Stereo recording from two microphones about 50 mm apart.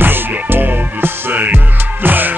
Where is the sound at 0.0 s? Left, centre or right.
Right.